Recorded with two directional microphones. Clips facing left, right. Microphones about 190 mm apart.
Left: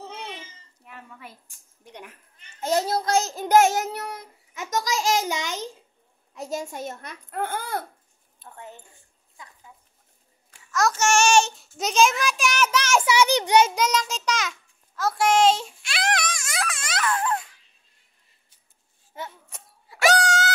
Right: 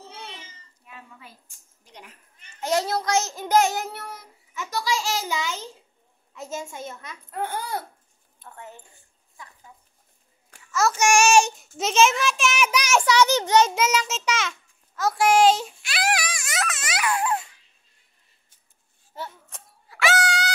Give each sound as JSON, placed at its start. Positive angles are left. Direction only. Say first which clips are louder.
{"t": 0.8, "sound": "a sound", "louder": "left 3 dB", "side_deg": 65}
{"t": 2.6, "sound": "a child's voice", "louder": "left 1 dB", "side_deg": 30}
{"t": 3.5, "sound": "a child's voice", "louder": "left 3 dB", "side_deg": 50}
{"t": 6.7, "sound": "a child's voice", "louder": "left 3 dB", "side_deg": 45}
{"t": 10.7, "sound": "a child's voice", "louder": "even", "side_deg": -5}
{"t": 11.0, "sound": "child singing", "louder": "right 2 dB", "side_deg": -10}
{"t": 11.7, "sound": "a child's voice", "louder": "right 1 dB", "side_deg": 0}
{"t": 13.0, "sound": "a child's voice", "louder": "right 1 dB", "side_deg": 10}
{"t": 13.7, "sound": "a child's voice", "louder": "even", "side_deg": -5}
{"t": 19.1, "sound": "a sound", "louder": "even", "side_deg": 15}
{"t": 20.0, "sound": "a sound", "louder": "left 3 dB", "side_deg": 40}